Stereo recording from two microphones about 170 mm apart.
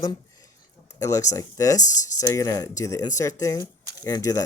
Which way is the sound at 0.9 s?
20° left (ahead or behind).